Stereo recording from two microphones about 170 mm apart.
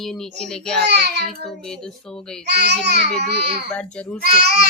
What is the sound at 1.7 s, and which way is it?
Speech, 5° left (ahead or behind).